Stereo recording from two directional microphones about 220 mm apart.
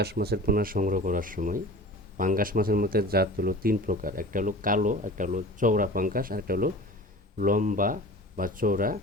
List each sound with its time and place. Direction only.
0.0 s speech: 45° right (ahead or behind)